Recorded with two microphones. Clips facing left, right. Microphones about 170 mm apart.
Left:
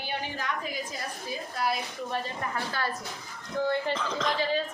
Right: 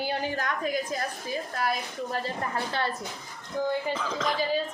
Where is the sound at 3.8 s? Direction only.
Centre (ahead or behind).